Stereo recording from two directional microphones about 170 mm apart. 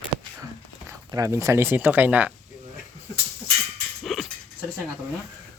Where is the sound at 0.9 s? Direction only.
20° right (ahead or behind).